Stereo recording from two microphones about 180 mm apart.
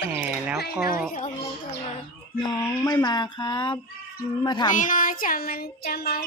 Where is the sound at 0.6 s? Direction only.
60° left (ahead or behind).